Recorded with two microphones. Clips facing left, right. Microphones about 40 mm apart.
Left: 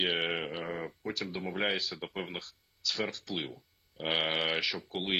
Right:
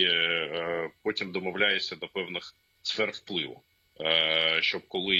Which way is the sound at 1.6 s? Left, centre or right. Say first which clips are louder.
Right 5 dB; right.